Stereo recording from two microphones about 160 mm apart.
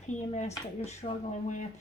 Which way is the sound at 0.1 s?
45° left (ahead or behind).